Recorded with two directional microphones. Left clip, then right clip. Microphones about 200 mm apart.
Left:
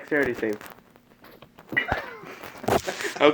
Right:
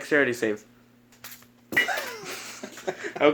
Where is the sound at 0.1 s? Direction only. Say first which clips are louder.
Right 2 dB; 20° right (ahead or behind).